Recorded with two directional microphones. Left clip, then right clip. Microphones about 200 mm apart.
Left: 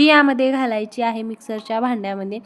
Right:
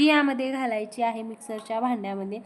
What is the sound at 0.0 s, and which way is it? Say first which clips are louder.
A woman's voice: left 8 dB; 25° left (ahead or behind).